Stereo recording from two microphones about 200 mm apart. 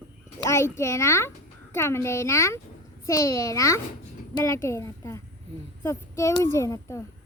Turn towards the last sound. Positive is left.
turn(degrees=15)  # may be behind; listen again after turning